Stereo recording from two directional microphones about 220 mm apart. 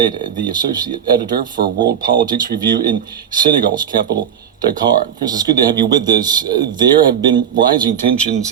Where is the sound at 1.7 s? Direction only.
45° right (ahead or behind).